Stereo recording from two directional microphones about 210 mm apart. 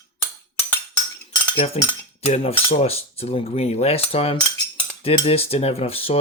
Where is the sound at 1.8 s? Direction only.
30° left (ahead or behind).